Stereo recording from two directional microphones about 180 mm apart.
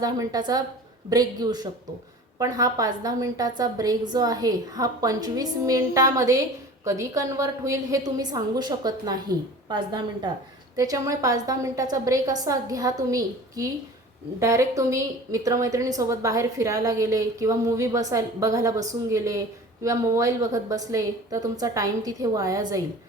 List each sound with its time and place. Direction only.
0.0 s a woman's voice: 20° right (ahead or behind)